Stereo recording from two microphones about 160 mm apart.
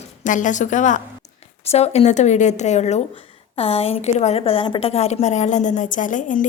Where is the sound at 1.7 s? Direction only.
40° left (ahead or behind).